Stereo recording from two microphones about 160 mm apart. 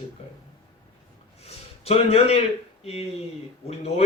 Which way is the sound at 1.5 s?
40° left (ahead or behind).